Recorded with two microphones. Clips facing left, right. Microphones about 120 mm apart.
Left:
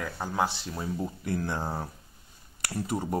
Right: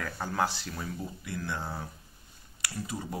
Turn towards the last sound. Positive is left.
turn(degrees=50)  # may be behind; listen again after turning